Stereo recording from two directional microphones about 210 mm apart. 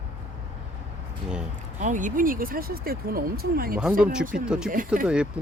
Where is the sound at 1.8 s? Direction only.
35° right (ahead or behind).